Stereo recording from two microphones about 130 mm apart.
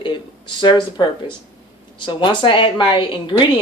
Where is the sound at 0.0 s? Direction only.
40° left (ahead or behind).